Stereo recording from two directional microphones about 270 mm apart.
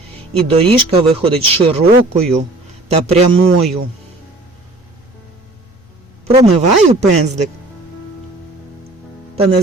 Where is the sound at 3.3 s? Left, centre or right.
Right.